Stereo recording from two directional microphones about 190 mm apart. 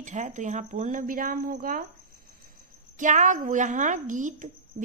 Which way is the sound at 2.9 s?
40° right (ahead or behind).